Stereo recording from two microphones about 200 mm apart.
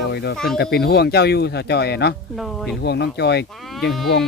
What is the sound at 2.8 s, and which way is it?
Speech, 60° left (ahead or behind).